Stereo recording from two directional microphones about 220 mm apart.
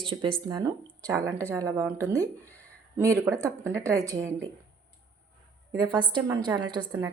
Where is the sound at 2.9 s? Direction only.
15° right (ahead or behind).